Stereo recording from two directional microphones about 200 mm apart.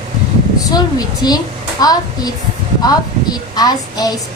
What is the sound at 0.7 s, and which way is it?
A woman's voice, 20° left (ahead or behind).